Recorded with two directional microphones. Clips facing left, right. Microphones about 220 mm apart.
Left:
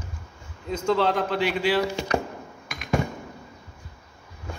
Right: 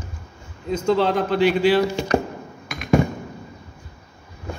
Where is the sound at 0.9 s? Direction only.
25° right (ahead or behind).